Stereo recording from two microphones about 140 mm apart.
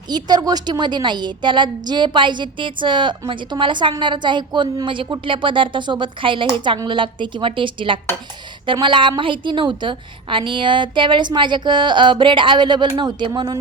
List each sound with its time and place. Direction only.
0.1 s a woman's voice: 30° right (ahead or behind)